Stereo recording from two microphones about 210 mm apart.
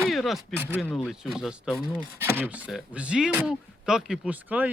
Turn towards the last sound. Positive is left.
turn(degrees=-5)  # may be behind; listen again after turning